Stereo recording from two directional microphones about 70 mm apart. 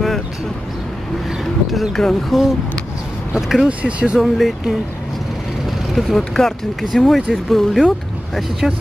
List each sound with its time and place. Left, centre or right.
1.7 s speech: centre
3.6 s speech: centre
4.2 s speech: centre
5.9 s speech: centre